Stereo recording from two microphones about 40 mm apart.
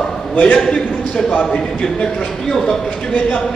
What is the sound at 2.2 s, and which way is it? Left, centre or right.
Speech, centre.